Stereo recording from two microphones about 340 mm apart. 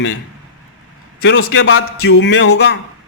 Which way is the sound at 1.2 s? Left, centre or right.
Left.